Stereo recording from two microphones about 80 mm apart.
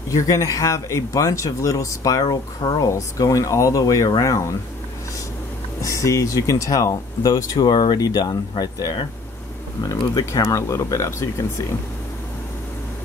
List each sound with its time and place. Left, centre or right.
0.1 s speech: left
5.8 s speech: left
7.7 s speech: left
8.2 s speech: left
10.4 s speech: left